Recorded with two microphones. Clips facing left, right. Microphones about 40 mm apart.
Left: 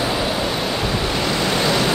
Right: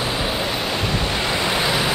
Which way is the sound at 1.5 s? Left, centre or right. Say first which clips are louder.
Left 2 dB; centre.